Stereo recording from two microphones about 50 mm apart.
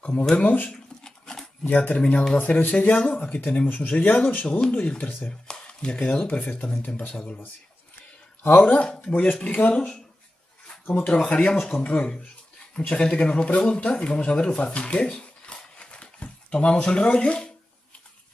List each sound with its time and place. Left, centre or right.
0.0 s speech: left
0.7 s a sound: centre
1.6 s speech: left
4.5 s speech: centre
5.5 s a sound: left
6.2 s speech: left
8.6 s speech: left
9.1 s speech: left
9.8 s speech: centre
11.1 s speech: left